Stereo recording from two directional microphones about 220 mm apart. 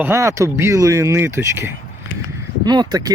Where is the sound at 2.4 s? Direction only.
20° right (ahead or behind).